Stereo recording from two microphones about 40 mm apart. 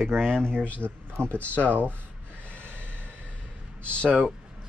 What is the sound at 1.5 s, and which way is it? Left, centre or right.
Speech, right.